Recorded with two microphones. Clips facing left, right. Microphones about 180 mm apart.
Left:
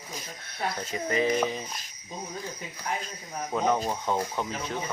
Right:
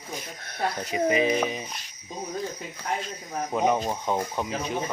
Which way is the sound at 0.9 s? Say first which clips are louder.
Right 3 dB; 15° right (ahead or behind).